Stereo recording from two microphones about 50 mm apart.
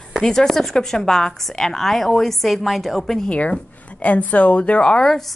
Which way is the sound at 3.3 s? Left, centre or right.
Left.